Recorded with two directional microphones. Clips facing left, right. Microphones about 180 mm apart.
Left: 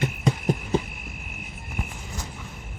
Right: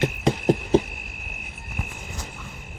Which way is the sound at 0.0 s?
70° right (ahead or behind).